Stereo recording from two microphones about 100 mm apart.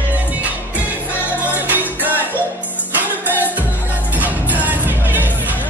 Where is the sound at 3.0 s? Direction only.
15° right (ahead or behind).